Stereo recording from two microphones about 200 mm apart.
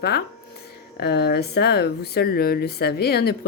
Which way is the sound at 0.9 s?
55° left (ahead or behind).